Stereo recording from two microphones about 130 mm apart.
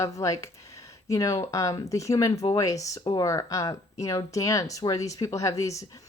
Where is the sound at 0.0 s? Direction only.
25° left (ahead or behind).